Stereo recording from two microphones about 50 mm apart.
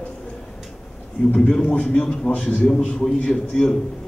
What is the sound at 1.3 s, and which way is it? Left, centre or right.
A man's voice, centre.